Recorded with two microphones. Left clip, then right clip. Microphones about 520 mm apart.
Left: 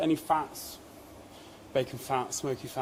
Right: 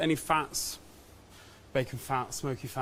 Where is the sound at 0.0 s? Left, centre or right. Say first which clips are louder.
Left 1 dB; right.